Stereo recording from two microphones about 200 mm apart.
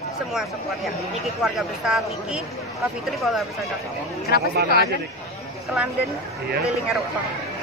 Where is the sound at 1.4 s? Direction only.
5° right (ahead or behind).